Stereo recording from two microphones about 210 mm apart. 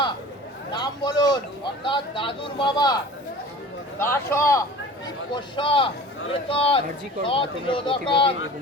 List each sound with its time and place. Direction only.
0.7 s a man's voice: 20° left (ahead or behind)
4.0 s speech: 10° left (ahead or behind)